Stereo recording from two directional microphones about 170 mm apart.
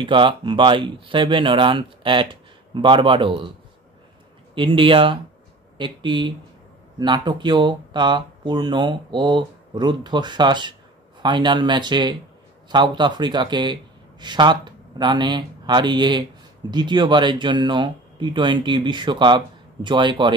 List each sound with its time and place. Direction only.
0.0 s speech: 30° right (ahead or behind)
4.6 s speech: 30° right (ahead or behind)